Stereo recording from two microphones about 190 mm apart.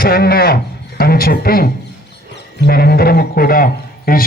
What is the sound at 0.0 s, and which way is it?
A man's voice, 50° left (ahead or behind).